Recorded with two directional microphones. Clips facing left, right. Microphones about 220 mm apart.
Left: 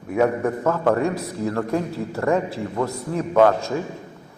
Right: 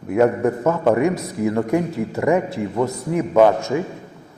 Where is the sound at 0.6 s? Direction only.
20° right (ahead or behind).